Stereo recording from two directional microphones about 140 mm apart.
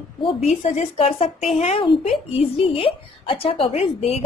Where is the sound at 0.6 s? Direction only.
50° left (ahead or behind).